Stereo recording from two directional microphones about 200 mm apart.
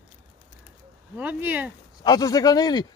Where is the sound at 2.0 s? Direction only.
20° left (ahead or behind).